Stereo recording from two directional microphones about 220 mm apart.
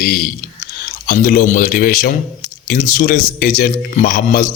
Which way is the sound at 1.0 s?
40° left (ahead or behind).